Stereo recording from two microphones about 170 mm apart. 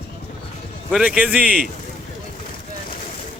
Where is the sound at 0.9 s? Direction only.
5° right (ahead or behind).